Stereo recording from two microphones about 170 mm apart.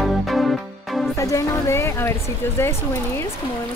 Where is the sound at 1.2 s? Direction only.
20° left (ahead or behind).